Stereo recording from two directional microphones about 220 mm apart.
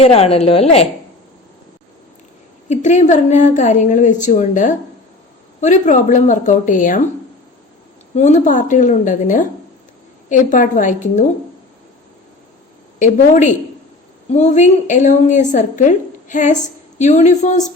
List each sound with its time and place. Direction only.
0.0 s a woman's voice: 25° left (ahead or behind)
2.6 s a woman's voice: 35° left (ahead or behind)
8.1 s a woman's voice: 30° left (ahead or behind)
13.0 s a woman's voice: 35° left (ahead or behind)